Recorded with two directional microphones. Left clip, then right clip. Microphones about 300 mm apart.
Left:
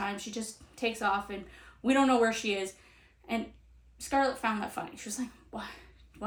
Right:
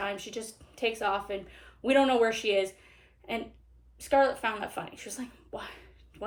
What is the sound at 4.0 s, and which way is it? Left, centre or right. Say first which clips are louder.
Speech: right 4 dB; left.